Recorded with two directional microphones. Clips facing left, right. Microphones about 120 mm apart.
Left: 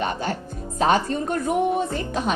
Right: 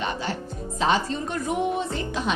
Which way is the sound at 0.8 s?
50° left (ahead or behind).